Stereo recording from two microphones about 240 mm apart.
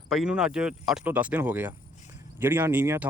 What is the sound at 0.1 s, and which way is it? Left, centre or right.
Speech, centre.